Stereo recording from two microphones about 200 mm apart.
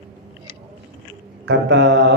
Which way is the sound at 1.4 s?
65° right (ahead or behind).